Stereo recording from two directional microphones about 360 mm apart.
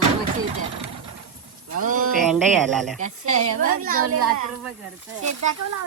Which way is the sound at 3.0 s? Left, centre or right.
Right.